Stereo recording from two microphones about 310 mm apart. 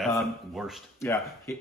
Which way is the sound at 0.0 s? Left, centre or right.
Centre.